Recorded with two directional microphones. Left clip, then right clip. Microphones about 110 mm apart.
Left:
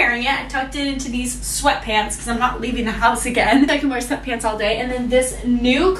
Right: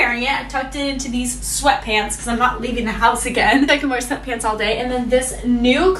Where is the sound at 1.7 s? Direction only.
15° right (ahead or behind).